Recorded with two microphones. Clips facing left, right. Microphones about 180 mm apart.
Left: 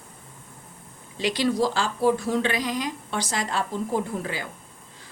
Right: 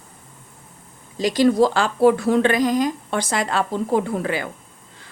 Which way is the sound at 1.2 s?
45° right (ahead or behind).